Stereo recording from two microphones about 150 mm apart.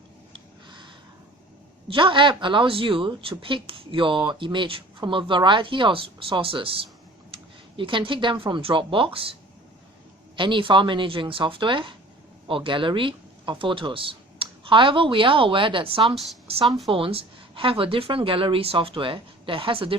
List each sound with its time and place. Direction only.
1.9 s speech: 35° right (ahead or behind)
10.3 s speech: 35° right (ahead or behind)
16.6 s speech: centre (ahead or behind)
16.9 s speech: 40° right (ahead or behind)